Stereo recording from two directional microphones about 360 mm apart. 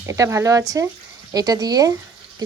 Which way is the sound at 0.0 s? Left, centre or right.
Centre.